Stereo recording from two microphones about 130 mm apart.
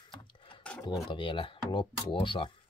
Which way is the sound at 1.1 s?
40° left (ahead or behind).